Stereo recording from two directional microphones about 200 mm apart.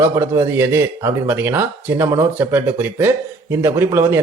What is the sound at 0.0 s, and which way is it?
A man's voice, 15° right (ahead or behind).